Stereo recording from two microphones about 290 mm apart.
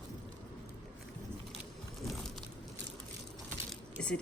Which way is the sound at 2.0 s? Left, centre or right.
Centre.